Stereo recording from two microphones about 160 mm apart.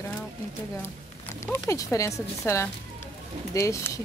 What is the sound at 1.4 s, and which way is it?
A woman's voice, 20° left (ahead or behind).